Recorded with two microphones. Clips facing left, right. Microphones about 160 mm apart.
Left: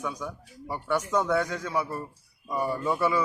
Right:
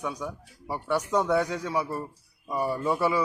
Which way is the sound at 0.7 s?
30° right (ahead or behind).